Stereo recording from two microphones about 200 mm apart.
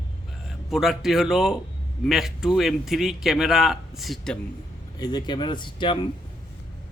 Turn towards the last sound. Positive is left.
turn(degrees=25)  # may be behind; listen again after turning